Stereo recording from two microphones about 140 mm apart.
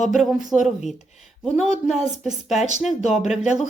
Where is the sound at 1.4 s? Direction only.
Centre (ahead or behind).